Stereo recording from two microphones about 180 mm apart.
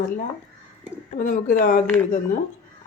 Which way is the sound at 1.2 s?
45° left (ahead or behind).